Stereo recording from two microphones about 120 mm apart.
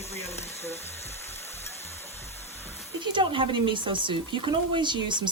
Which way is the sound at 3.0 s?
45° right (ahead or behind).